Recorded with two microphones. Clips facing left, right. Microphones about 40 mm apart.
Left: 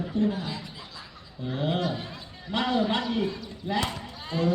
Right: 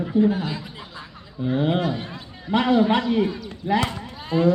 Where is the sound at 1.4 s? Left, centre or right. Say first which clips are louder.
Right 6 dB; centre.